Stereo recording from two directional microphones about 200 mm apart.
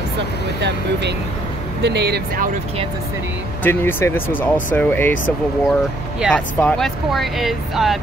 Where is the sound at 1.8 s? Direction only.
55° right (ahead or behind).